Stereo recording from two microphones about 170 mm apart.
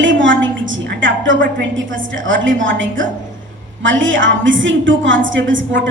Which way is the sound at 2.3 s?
90° right.